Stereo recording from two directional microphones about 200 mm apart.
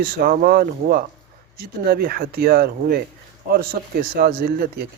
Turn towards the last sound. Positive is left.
turn(degrees=-50)  # may be behind; listen again after turning